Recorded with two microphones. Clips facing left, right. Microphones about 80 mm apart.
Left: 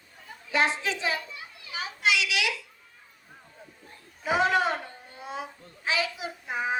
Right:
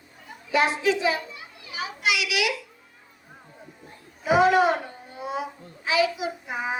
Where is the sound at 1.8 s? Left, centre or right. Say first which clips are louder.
Right 1 dB; left.